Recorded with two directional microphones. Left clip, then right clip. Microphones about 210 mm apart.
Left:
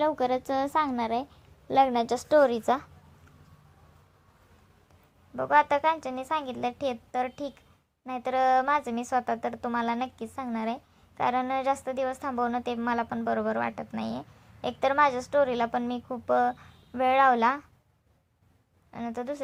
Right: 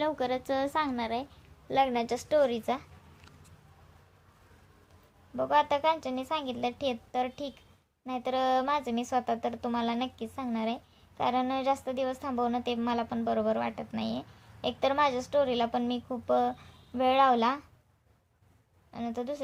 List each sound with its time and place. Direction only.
0.0 s a woman's voice: 15° left (ahead or behind)
5.4 s a woman's voice: 15° left (ahead or behind)
18.9 s a woman's voice: 15° left (ahead or behind)